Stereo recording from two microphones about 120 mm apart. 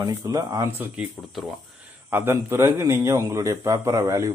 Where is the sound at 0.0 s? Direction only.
30° right (ahead or behind).